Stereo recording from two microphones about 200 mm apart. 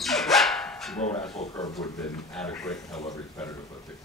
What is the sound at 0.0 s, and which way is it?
Dog, centre (ahead or behind).